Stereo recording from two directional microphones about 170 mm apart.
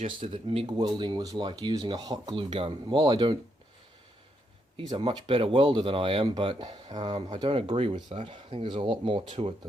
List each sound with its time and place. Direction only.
0.0 s speech: 35° right (ahead or behind)
4.9 s speech: 30° right (ahead or behind)